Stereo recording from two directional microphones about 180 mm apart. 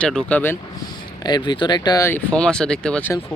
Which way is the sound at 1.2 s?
25° left (ahead or behind).